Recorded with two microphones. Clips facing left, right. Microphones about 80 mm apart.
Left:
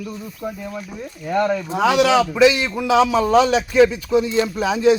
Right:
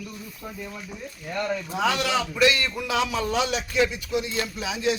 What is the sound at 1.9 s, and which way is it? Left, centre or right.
Speech, left.